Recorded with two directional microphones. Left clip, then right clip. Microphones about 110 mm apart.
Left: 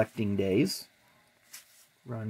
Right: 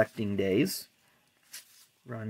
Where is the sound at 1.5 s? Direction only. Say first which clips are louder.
Right 3 dB; 25° right (ahead or behind).